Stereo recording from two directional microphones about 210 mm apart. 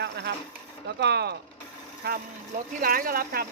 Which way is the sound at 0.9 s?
55° right (ahead or behind).